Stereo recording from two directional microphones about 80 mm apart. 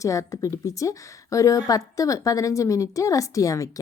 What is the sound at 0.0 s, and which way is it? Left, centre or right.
Speech, left.